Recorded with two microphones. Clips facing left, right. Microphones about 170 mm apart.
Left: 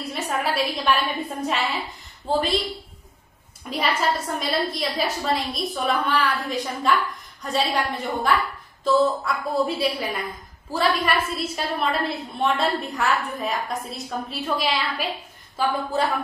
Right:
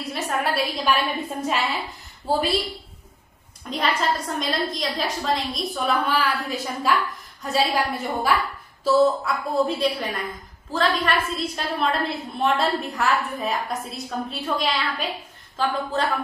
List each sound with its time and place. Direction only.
0.0 s a sound: centre (ahead or behind)
1.4 s a woman's voice: centre (ahead or behind)
4.4 s a woman's voice: 5° left (ahead or behind)